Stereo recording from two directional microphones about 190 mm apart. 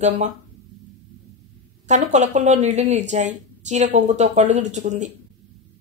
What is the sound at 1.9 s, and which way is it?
Speech, 40° right (ahead or behind).